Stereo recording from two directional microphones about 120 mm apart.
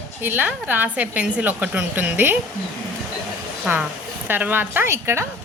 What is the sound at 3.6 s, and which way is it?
A woman's voice, 5° right (ahead or behind).